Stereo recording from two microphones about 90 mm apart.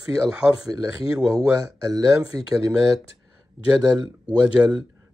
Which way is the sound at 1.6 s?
40° right (ahead or behind).